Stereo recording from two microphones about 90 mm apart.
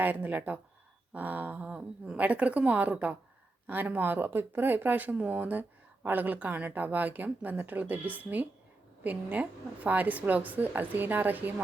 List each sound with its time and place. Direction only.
0.0 s speech: 20° right (ahead or behind)